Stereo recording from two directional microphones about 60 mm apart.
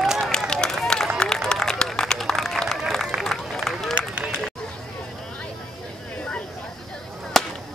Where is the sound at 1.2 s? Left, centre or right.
Centre.